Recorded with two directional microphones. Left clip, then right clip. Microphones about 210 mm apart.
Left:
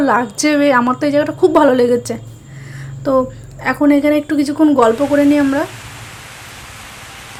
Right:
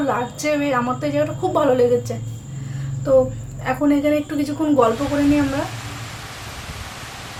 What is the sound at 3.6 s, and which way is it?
A woman's voice, 35° left (ahead or behind).